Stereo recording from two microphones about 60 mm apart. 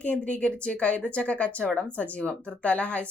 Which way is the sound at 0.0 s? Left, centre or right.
Left.